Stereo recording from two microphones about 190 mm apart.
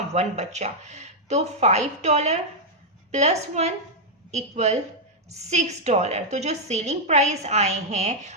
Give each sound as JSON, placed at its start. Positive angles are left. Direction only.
{"t": 0.1, "sound": "a woman's voice", "side_deg": -35}